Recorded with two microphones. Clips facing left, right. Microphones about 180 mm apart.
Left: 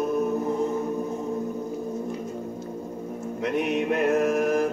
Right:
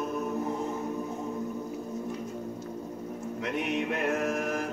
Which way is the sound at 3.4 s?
40° left (ahead or behind).